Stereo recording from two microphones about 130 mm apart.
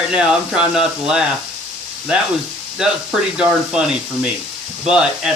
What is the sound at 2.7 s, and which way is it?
Speech, 5° right (ahead or behind).